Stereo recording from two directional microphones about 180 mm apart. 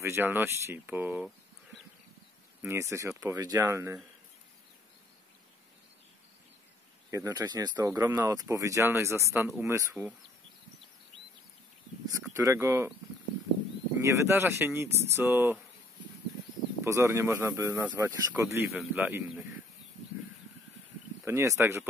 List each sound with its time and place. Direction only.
0.0 s speech: 10° right (ahead or behind)
2.6 s speech: 15° right (ahead or behind)
7.1 s speech: 20° right (ahead or behind)
12.4 s speech: 15° right (ahead or behind)
14.0 s speech: 15° right (ahead or behind)
16.8 s speech: 15° right (ahead or behind)
21.3 s speech: 15° right (ahead or behind)